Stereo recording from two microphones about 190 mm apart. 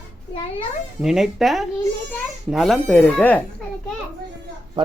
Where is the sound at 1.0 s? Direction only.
Centre (ahead or behind).